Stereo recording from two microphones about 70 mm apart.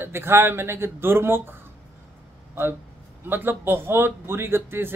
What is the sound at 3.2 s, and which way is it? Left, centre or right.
A man's voice, right.